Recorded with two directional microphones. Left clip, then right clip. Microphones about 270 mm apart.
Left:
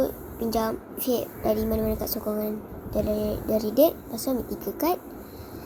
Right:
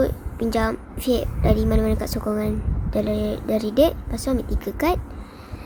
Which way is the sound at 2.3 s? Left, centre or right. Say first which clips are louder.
Right 4 dB; right.